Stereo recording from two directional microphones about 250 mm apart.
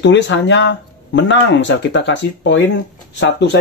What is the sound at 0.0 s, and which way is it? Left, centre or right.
Speech, left.